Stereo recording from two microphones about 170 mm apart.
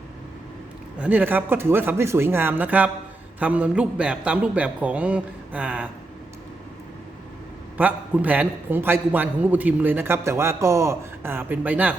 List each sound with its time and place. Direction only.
0.9 s a man's voice: 10° right (ahead or behind)
7.8 s a man's voice: 10° right (ahead or behind)